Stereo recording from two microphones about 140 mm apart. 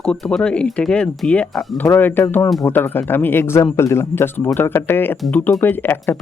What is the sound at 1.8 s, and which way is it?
Speech, 15° left (ahead or behind).